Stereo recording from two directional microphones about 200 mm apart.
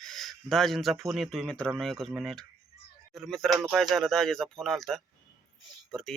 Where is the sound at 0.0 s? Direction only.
Centre (ahead or behind).